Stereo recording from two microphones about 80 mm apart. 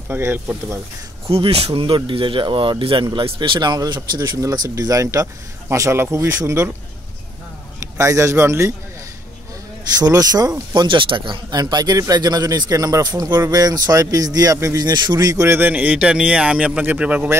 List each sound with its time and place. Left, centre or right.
0.1 s speech: right
1.8 s speech: right
4.4 s speech: right
8.0 s speech: right
9.9 s speech: right
11.5 s a man's voice: right
14.9 s speech: right
15.4 s speech: right
15.7 s speech: centre